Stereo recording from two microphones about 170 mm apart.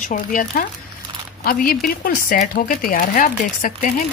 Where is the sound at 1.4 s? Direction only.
60° left (ahead or behind).